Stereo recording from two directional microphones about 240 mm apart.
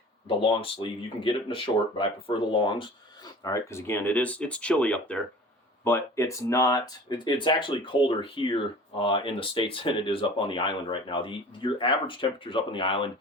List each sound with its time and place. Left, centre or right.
0.3 s speech: left